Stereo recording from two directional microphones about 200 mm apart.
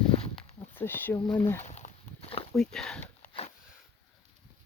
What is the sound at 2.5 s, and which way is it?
Speech, 5° left (ahead or behind).